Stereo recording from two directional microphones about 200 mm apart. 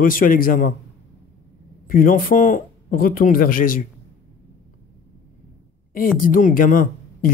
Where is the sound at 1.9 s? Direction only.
45° left (ahead or behind).